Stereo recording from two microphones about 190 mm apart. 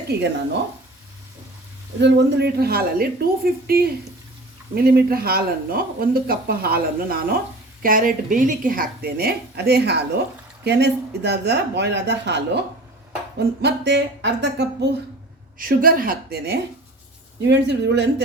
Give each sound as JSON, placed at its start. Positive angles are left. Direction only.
{"t": 0.1, "sound": "a woman's voice", "side_deg": -60}
{"t": 2.0, "sound": "a woman's voice", "side_deg": -65}
{"t": 13.6, "sound": "a woman's voice", "side_deg": -65}
{"t": 15.5, "sound": "speech", "side_deg": -50}
{"t": 17.4, "sound": "a woman's voice", "side_deg": -65}